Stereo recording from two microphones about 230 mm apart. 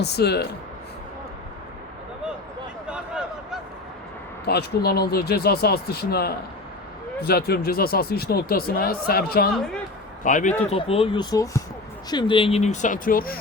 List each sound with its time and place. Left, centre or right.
0.0 s speech: left
2.8 s a sound: centre
4.4 s speech: left